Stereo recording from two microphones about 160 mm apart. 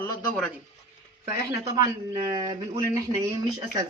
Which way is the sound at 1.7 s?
30° right (ahead or behind).